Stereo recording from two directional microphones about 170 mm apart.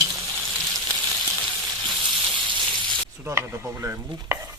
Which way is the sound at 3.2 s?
15° right (ahead or behind).